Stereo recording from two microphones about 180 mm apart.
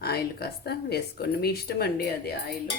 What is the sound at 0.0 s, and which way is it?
Speech, 60° left (ahead or behind).